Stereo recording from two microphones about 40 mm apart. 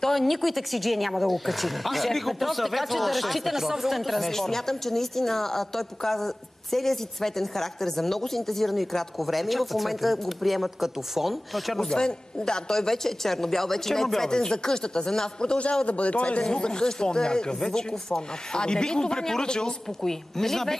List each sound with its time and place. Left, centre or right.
0.0 s speech: centre
11.8 s speech: centre
15.8 s speech: left
16.4 s speech: centre